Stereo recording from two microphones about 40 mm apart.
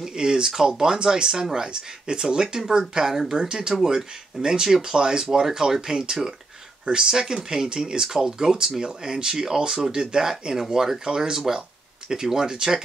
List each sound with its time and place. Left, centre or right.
0.0 s speech: centre